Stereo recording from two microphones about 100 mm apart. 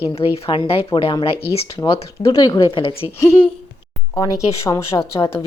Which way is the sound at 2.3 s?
50° left (ahead or behind).